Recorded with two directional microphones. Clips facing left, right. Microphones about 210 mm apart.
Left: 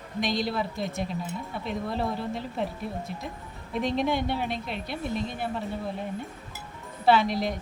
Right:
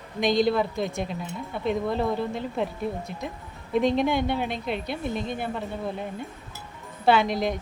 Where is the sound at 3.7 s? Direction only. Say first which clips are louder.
Right 4 dB; centre (ahead or behind).